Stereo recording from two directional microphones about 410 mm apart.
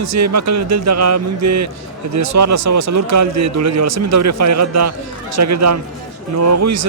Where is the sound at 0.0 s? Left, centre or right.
Right.